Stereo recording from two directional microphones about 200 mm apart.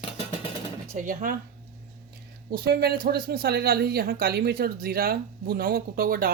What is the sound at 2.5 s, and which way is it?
Speech, 50° right (ahead or behind).